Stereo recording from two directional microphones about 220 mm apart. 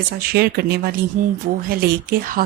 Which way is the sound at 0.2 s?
45° right (ahead or behind).